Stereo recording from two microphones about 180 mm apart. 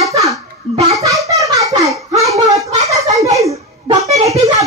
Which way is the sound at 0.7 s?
20° right (ahead or behind).